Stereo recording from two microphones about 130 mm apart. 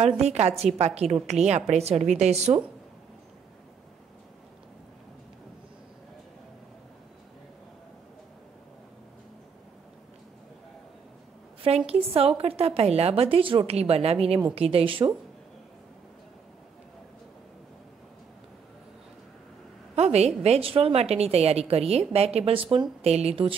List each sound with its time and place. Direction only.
0.0 s a woman's voice: 60° right (ahead or behind)
11.6 s a woman's voice: 50° right (ahead or behind)
20.0 s a woman's voice: 55° right (ahead or behind)